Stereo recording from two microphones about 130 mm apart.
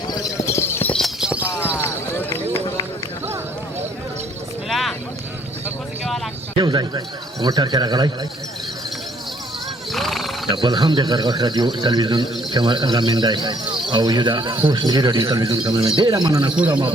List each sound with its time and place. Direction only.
0.1 s clip-clop: 25° left (ahead or behind)
0.9 s clip-clop: centre (ahead or behind)
1.5 s basketball bounce: 20° left (ahead or behind)
4.7 s a sound: centre (ahead or behind)
6.6 s speech: 35° right (ahead or behind)
9.9 s horse: centre (ahead or behind)
10.5 s speech: 35° right (ahead or behind)